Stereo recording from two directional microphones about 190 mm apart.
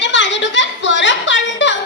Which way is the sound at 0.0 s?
70° left (ahead or behind).